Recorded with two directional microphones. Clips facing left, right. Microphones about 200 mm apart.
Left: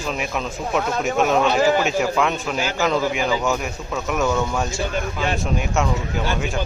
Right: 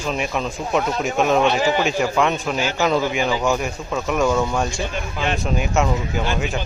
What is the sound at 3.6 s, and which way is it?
Speech, centre (ahead or behind).